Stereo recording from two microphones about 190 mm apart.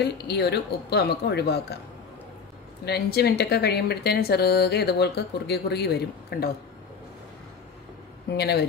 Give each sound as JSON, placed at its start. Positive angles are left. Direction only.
{"t": 0.0, "sound": "speech", "side_deg": 60}
{"t": 2.8, "sound": "speech", "side_deg": 60}
{"t": 8.3, "sound": "speech", "side_deg": 60}